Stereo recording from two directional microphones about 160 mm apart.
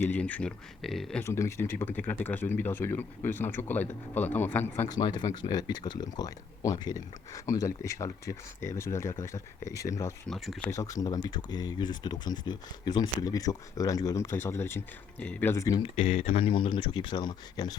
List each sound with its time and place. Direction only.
0.0 s speech: 10° left (ahead or behind)
1.2 s speech: 15° left (ahead or behind)
4.9 s speech: 25° left (ahead or behind)
10.2 s speech: centre (ahead or behind)
10.7 s speech: 20° left (ahead or behind)
15.8 s speech: 35° left (ahead or behind)